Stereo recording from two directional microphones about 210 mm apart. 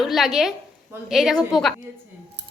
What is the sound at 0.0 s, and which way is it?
A woman's voice, centre (ahead or behind).